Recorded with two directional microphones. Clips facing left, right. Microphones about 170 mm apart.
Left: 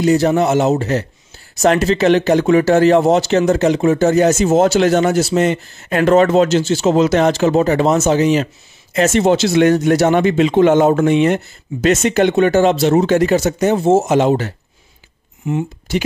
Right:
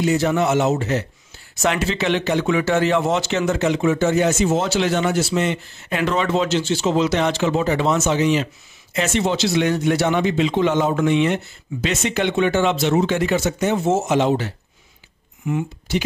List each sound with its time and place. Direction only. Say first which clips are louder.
0.0 s a man's voice: left 5 dB; 40° left (ahead or behind)
15.5 s speech: left 3 dB; 30° left (ahead or behind)